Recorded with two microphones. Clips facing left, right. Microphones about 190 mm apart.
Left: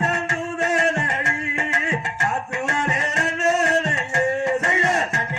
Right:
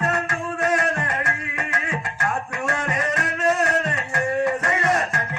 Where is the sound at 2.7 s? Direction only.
25° left (ahead or behind).